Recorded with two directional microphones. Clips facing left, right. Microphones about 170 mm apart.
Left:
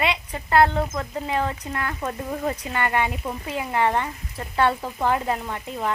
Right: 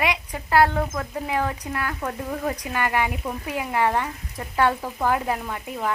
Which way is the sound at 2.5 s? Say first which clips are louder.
Even; 10° right (ahead or behind).